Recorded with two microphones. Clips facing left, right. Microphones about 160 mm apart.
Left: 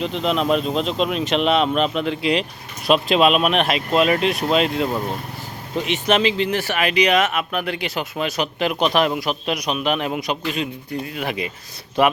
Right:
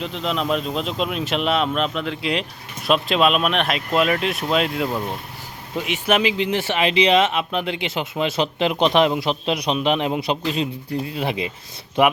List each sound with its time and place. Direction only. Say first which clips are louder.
0.0 s speech: left 4 dB; centre (ahead or behind); by 12.1 s 15° right (ahead or behind)